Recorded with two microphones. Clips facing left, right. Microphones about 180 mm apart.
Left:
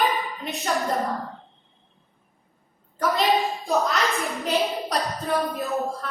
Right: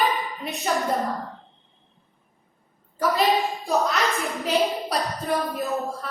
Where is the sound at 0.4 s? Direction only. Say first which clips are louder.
Right 1 dB; centre (ahead or behind).